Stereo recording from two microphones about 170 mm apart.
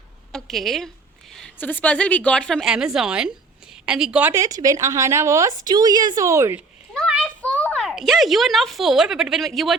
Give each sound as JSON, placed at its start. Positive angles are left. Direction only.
{"t": 0.3, "sound": "a woman's voice", "side_deg": 0}
{"t": 6.9, "sound": "a child's voice", "side_deg": 0}